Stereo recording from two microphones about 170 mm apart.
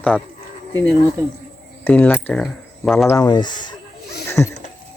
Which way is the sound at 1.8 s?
10° left (ahead or behind).